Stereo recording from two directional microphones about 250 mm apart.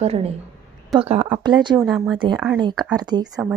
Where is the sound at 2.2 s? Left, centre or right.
Centre.